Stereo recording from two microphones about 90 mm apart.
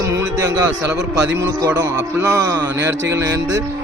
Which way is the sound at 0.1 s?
45° right (ahead or behind).